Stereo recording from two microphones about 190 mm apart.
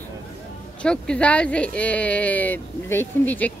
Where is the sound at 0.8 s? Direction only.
5° left (ahead or behind).